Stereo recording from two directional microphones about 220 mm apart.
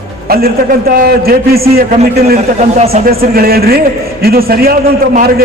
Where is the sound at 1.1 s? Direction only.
45° right (ahead or behind).